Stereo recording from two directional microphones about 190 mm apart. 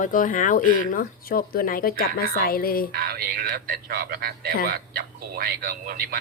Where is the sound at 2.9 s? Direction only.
50° right (ahead or behind).